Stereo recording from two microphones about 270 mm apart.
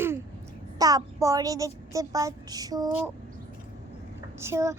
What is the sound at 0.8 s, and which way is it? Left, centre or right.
A child's voice, centre.